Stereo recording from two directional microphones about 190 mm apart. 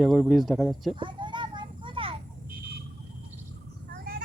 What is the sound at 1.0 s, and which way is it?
Children playing, 25° right (ahead or behind).